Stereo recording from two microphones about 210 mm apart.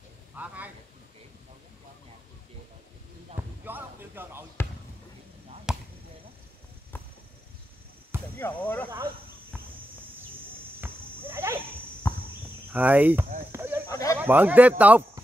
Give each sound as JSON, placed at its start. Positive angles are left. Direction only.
{"t": 0.4, "sound": "a man's voice", "side_deg": -10}
{"t": 3.3, "sound": "speech", "side_deg": -10}
{"t": 5.7, "sound": "basketball bounce", "side_deg": 0}
{"t": 8.4, "sound": "speech", "side_deg": 10}
{"t": 10.8, "sound": "a sound", "side_deg": -10}
{"t": 12.7, "sound": "speech", "side_deg": -5}
{"t": 13.5, "sound": "a sound", "side_deg": -10}
{"t": 13.8, "sound": "a sound", "side_deg": 15}
{"t": 14.1, "sound": "speech", "side_deg": -10}